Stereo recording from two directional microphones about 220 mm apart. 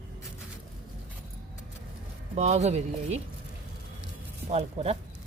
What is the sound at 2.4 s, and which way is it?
Speech, 30° right (ahead or behind).